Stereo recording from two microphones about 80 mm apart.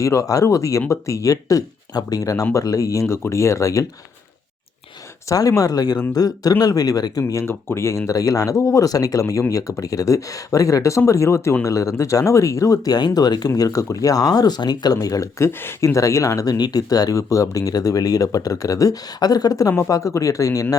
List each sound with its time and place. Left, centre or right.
0.0 s speech: left
5.3 s speech: left
7.4 s speech: left
15.4 s speech: left
16.6 s speech: left